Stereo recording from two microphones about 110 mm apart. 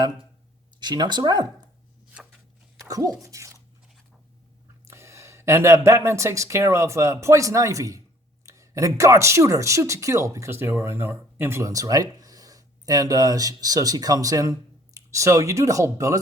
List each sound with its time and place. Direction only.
0.8 s speech: 40° right (ahead or behind)
2.7 s speech: 35° right (ahead or behind)
4.9 s speech: 25° right (ahead or behind)